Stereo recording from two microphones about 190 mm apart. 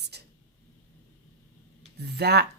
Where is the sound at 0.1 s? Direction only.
60° right (ahead or behind).